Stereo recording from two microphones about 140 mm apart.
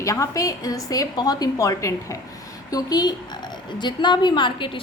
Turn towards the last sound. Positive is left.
turn(degrees=35)  # may be behind; listen again after turning